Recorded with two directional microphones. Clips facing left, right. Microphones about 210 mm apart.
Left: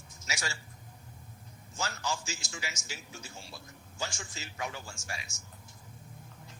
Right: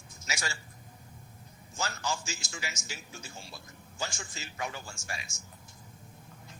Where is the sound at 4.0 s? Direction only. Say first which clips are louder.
Right 1 dB; 50° right (ahead or behind).